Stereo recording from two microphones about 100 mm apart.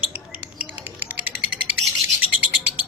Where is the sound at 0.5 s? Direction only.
15° right (ahead or behind).